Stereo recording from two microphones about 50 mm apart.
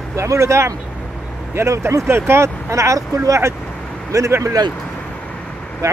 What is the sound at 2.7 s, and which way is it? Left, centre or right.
Speech, right.